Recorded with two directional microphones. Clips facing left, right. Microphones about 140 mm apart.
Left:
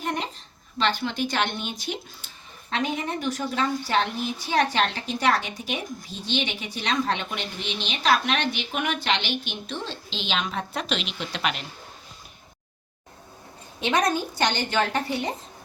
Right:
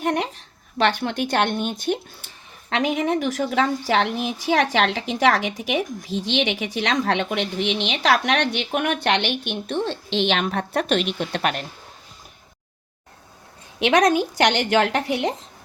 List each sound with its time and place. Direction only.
0.0 s a woman's voice: 70° right (ahead or behind); by 11.6 s 50° right (ahead or behind)
13.7 s a woman's voice: 90° right